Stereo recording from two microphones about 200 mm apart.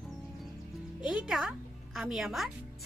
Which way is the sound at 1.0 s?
Centre (ahead or behind).